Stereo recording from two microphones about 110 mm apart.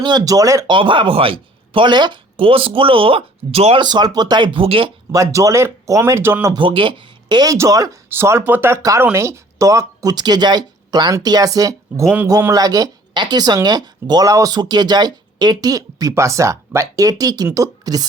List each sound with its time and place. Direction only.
0.0 s speech: 40° right (ahead or behind)
0.7 s speech: 50° right (ahead or behind); by 3.8 s 65° right (ahead or behind)
3.8 s speech: 40° right (ahead or behind)
5.1 s speech: 30° right (ahead or behind)
6.5 s speech: 50° right (ahead or behind); by 18.0 s 35° right (ahead or behind)